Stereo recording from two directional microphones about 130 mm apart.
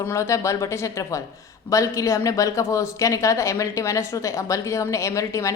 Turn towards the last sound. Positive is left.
turn(degrees=25)  # may be behind; listen again after turning